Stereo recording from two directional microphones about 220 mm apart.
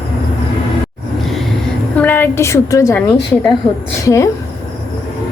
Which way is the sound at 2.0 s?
10° left (ahead or behind).